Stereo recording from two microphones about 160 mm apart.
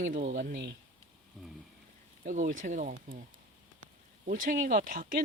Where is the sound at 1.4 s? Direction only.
5° left (ahead or behind).